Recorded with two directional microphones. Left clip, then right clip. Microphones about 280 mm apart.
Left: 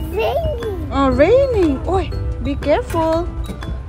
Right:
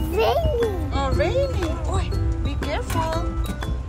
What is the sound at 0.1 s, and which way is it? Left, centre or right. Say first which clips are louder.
Music: left 2 dB; centre.